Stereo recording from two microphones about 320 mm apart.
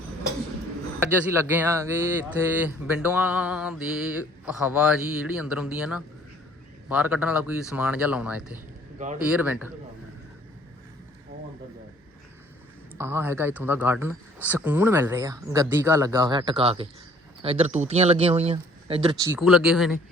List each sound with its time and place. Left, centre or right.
0.9 s speech: centre
13.0 s speech: centre
19.4 s speech: centre